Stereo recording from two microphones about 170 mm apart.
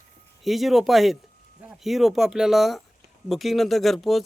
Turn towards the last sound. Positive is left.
turn(degrees=0)  # may be behind; listen again after turning